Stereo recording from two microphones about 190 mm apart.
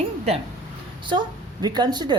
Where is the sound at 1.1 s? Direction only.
20° right (ahead or behind).